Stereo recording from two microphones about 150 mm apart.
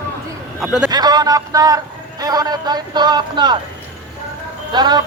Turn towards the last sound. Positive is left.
turn(degrees=-30)  # may be behind; listen again after turning